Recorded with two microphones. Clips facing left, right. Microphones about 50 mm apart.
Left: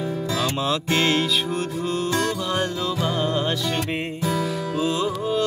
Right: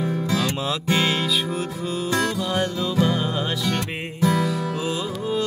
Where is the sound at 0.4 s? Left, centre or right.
Centre.